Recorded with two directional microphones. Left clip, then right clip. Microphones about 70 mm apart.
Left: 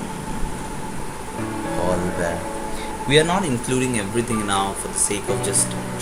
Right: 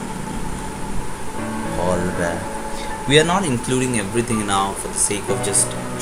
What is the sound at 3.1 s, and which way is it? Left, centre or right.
Speech, right.